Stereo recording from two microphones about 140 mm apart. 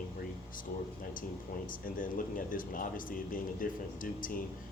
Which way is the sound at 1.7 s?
75° left (ahead or behind).